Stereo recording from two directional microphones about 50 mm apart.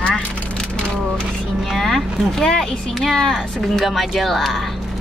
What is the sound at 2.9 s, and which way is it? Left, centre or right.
Speech, centre.